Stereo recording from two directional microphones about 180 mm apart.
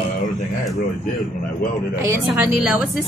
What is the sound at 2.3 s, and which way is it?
Speech, 10° right (ahead or behind).